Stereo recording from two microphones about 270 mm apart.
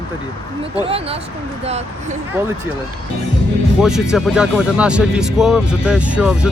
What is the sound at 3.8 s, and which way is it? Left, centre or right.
Speech, centre.